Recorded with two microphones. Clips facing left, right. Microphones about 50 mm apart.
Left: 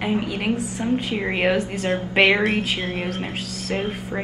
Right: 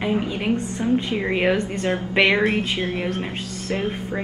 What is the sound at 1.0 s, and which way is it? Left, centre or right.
Speech, centre.